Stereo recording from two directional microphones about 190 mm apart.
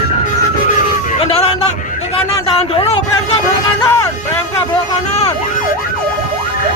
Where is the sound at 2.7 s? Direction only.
30° left (ahead or behind).